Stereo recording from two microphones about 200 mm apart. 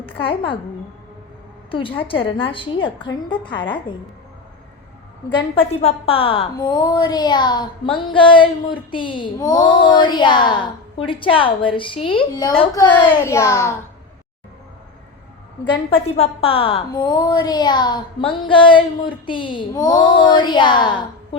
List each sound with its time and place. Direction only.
0.0 s a woman's voice: 25° left (ahead or behind)
1.7 s a woman's voice: 25° left (ahead or behind)
5.5 s a woman's voice: 25° left (ahead or behind)
12.9 s a child's voice: 10° left (ahead or behind)
15.7 s a woman's voice: 30° left (ahead or behind)